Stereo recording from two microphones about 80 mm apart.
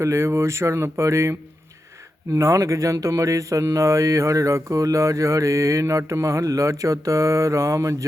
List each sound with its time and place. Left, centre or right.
0.0 s a man's voice: right